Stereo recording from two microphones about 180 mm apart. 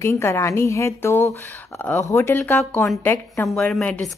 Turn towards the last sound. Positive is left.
turn(degrees=5)  # may be behind; listen again after turning